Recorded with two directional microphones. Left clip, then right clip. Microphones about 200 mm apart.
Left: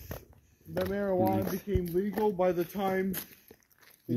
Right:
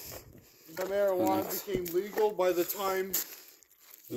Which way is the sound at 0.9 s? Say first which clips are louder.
Right 2 dB; 70° right (ahead or behind).